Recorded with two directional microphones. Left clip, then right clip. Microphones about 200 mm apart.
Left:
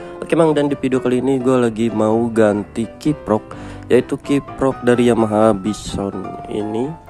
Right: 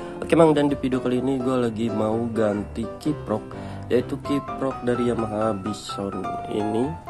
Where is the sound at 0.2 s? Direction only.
10° left (ahead or behind).